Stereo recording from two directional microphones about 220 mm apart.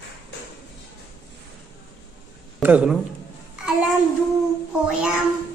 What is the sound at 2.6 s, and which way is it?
Speech, 5° right (ahead or behind).